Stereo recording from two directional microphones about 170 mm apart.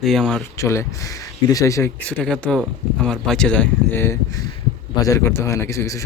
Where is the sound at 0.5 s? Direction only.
15° left (ahead or behind).